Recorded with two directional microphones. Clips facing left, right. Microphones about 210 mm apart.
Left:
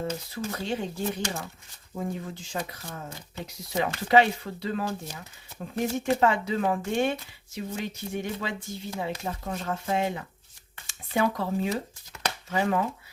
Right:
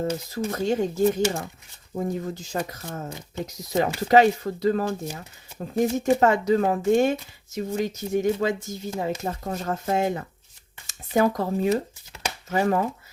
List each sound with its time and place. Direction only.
0.3 s speech: 45° right (ahead or behind)